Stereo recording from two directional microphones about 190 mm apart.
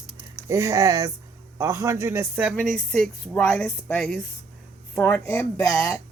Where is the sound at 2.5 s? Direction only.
5° left (ahead or behind).